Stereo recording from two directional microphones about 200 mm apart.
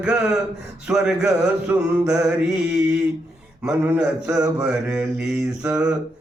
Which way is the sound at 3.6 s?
5° right (ahead or behind).